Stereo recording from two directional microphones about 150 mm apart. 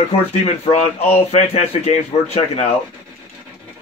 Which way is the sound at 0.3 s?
45° left (ahead or behind).